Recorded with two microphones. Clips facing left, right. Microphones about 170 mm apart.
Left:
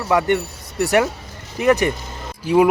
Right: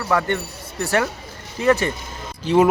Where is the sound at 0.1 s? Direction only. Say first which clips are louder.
Left 4 dB; 15° left (ahead or behind).